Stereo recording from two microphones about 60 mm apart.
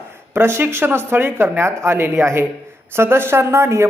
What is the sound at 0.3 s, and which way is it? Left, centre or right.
A man's voice, right.